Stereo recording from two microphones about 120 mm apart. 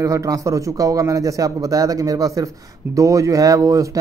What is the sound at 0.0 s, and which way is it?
Speech, 25° right (ahead or behind).